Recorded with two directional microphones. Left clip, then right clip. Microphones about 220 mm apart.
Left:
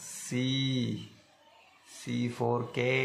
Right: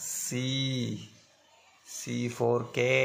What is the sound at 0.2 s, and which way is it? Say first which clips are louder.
Speech: left 1 dB; 15° right (ahead or behind).